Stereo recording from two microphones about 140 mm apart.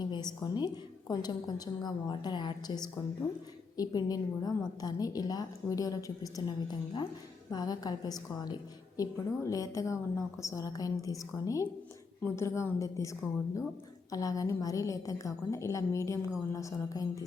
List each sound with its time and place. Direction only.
0.0 s a woman's voice: 30° left (ahead or behind)